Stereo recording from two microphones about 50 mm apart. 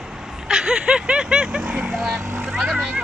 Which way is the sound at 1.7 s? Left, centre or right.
Centre.